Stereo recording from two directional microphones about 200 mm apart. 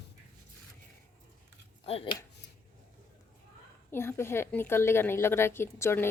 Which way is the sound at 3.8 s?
10° left (ahead or behind).